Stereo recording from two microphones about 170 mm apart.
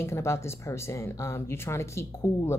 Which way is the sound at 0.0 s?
15° left (ahead or behind).